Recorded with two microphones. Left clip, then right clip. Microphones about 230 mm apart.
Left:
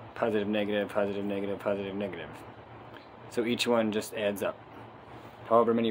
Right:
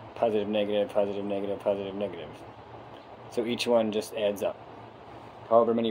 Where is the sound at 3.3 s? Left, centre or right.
Left.